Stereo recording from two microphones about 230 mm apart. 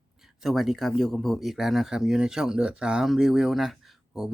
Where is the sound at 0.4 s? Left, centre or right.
Centre.